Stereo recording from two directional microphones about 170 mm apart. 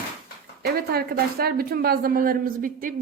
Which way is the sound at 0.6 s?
65° right (ahead or behind).